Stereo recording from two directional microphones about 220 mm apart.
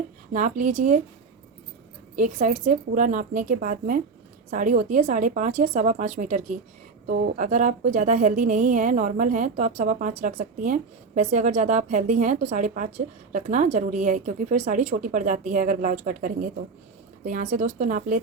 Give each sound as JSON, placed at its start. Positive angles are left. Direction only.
{"t": 0.3, "sound": "a woman's voice", "side_deg": -35}
{"t": 2.1, "sound": "a woman's voice", "side_deg": -35}